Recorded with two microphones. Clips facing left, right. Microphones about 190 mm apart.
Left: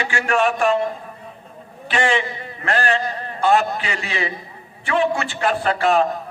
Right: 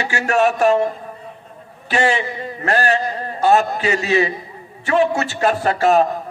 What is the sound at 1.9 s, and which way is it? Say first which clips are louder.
A man's voice: right 2 dB; 40° right (ahead or behind).